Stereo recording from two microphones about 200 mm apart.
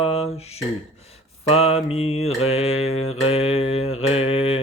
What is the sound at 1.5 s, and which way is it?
Mantra, 30° left (ahead or behind).